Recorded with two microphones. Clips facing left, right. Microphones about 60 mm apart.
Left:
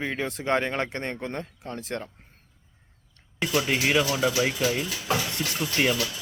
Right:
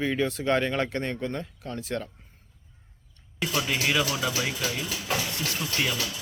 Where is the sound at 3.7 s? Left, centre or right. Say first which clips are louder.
Left 2 dB; left.